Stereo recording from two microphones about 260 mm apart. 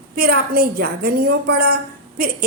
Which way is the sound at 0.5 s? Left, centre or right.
Right.